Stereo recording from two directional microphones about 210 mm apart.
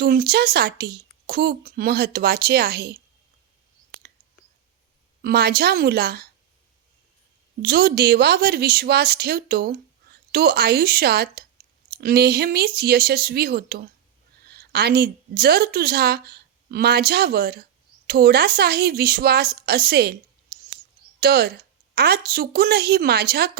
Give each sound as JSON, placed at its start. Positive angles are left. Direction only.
{"t": 0.0, "sound": "speech", "side_deg": -45}
{"t": 5.2, "sound": "speech", "side_deg": -50}
{"t": 7.6, "sound": "a woman's voice", "side_deg": -45}
{"t": 21.2, "sound": "speech", "side_deg": -50}